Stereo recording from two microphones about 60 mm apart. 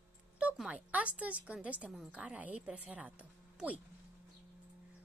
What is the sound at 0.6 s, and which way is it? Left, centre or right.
A woman's voice, right.